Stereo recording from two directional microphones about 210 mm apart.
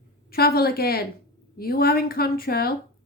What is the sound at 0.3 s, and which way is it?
Speech, 45° left (ahead or behind).